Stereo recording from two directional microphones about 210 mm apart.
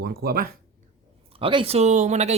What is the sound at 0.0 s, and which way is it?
Speech, 45° right (ahead or behind).